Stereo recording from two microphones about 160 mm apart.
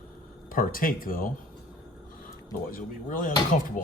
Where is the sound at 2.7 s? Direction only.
55° left (ahead or behind).